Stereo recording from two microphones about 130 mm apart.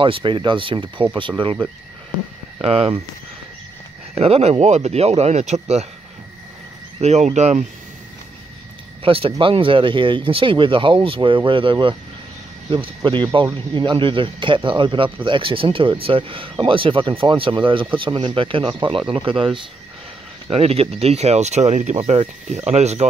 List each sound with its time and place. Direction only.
0.0 s speech: 40° right (ahead or behind)
2.6 s speech: 50° right (ahead or behind)
4.1 s speech: 55° right (ahead or behind)
7.0 s speech: 60° right (ahead or behind)
9.0 s speech: 45° right (ahead or behind)